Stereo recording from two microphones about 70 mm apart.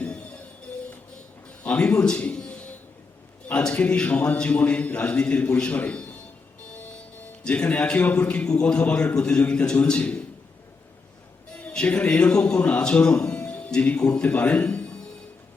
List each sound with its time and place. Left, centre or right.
1.5 s a sound: centre
3.5 s a man's voice: centre
11.5 s a man's voice: centre